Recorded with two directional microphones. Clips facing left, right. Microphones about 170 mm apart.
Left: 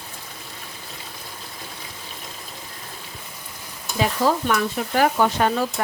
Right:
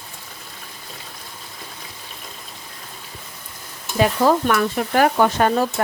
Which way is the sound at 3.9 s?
60° right (ahead or behind).